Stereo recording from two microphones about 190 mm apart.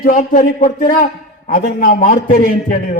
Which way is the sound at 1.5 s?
50° left (ahead or behind).